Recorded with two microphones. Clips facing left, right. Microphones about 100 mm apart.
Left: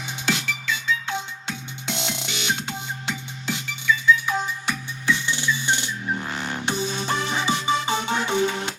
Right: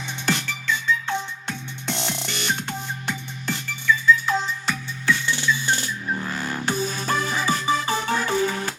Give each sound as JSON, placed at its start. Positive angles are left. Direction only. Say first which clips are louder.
{"t": 0.3, "sound": "music", "louder": "right 1 dB", "side_deg": 0}
{"t": 4.3, "sound": "music", "louder": "right 1 dB", "side_deg": 15}